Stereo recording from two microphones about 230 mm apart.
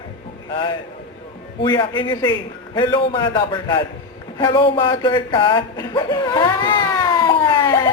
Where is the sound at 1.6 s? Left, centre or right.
Left.